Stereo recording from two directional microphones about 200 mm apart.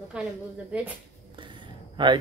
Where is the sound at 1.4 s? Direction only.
25° right (ahead or behind).